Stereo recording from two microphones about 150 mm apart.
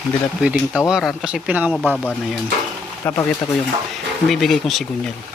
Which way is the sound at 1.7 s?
5° left (ahead or behind).